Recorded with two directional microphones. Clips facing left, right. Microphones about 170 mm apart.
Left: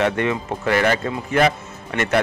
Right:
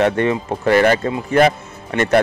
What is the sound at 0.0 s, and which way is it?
Speech, 35° right (ahead or behind).